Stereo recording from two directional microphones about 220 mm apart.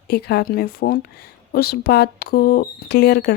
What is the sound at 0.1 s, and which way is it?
Speech, 45° left (ahead or behind).